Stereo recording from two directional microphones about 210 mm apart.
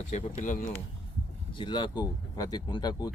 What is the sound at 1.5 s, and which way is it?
Speech, 20° left (ahead or behind).